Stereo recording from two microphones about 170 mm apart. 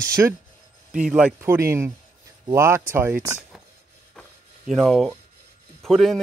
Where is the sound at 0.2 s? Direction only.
10° right (ahead or behind).